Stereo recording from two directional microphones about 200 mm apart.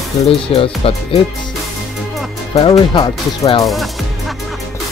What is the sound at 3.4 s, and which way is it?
Speech, 15° left (ahead or behind).